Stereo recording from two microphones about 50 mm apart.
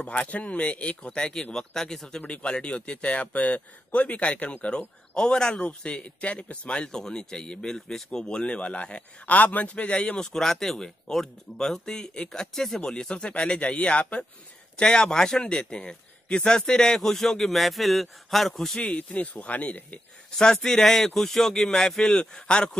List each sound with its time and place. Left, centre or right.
0.0 s speech: left; by 2.2 s centre
2.2 s speech: left
18.9 s speech: left
20.2 s speech: centre